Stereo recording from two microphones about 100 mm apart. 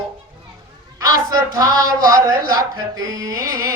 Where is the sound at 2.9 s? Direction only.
40° right (ahead or behind).